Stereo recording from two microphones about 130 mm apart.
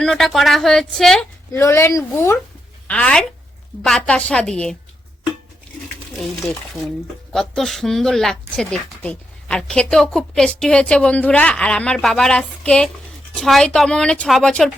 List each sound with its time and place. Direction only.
0.0 s speech: centre (ahead or behind)
1.5 s a woman's voice: 20° left (ahead or behind)
2.8 s speech: 10° left (ahead or behind)
6.1 s speech: centre (ahead or behind)